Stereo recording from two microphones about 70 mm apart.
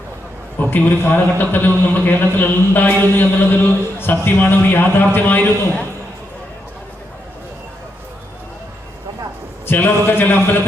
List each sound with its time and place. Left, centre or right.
0.6 s a man's voice: left
9.6 s a man's voice: left